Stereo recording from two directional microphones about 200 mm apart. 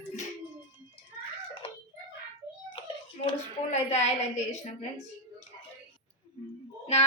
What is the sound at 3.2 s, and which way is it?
A woman's voice, 35° left (ahead or behind).